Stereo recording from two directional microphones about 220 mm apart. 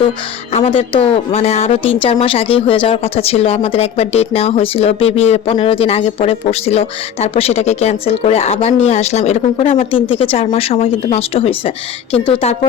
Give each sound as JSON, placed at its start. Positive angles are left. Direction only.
{"t": 0.5, "sound": "a woman's voice", "side_deg": 25}